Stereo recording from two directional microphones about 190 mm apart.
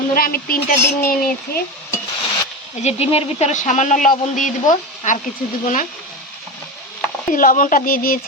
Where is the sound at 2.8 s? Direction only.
30° left (ahead or behind).